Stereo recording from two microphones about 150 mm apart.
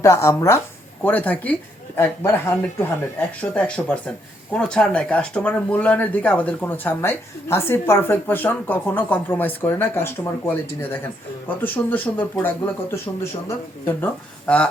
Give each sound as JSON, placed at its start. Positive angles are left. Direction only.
{"t": 0.0, "sound": "speech", "side_deg": 20}